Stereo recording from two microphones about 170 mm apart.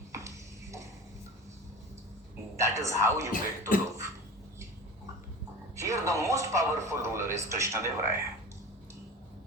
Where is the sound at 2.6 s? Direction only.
15° right (ahead or behind).